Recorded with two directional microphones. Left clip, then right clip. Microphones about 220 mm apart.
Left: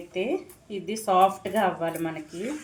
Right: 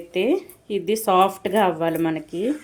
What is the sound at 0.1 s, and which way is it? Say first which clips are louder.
Speech: right 7 dB; 45° right (ahead or behind).